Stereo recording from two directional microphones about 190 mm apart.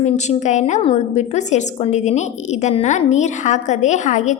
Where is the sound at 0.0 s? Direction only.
35° left (ahead or behind).